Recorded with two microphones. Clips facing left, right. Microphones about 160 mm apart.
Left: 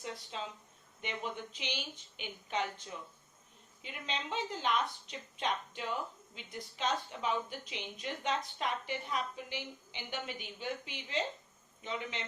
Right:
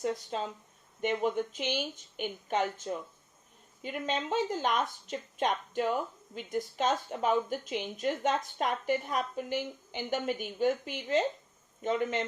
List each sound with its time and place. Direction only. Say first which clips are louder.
0.0 s a woman's voice: right 9 dB; 45° right (ahead or behind)